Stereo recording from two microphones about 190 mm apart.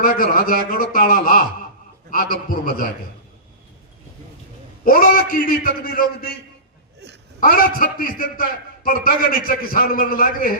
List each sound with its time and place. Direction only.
0.0 s a man's voice: 50° left (ahead or behind)
4.9 s a man's voice: 50° left (ahead or behind)
7.3 s a man's voice: 50° left (ahead or behind)